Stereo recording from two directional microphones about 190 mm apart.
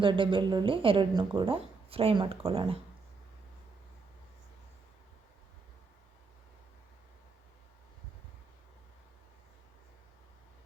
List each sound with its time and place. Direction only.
0.0 s speech: 25° right (ahead or behind)